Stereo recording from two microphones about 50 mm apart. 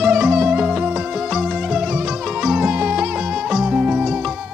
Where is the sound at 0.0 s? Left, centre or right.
Right.